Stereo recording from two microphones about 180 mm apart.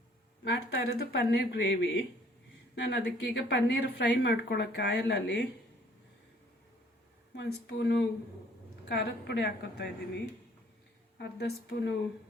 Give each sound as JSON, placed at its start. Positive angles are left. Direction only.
{"t": 0.4, "sound": "speech", "side_deg": 65}
{"t": 7.3, "sound": "speech", "side_deg": 80}
{"t": 11.2, "sound": "speech", "side_deg": 70}